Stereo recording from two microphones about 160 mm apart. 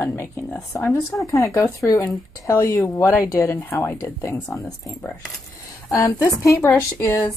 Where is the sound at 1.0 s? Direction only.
Centre (ahead or behind).